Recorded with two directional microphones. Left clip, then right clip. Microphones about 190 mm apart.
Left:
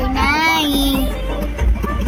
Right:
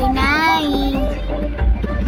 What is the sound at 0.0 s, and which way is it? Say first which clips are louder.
Child singing: even; centre (ahead or behind).